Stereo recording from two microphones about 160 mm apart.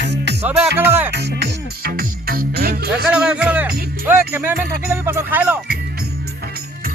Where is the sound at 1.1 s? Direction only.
90° right; by 2.9 s 75° right (ahead or behind).